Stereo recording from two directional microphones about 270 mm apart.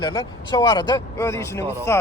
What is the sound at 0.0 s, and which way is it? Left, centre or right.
Speech, centre.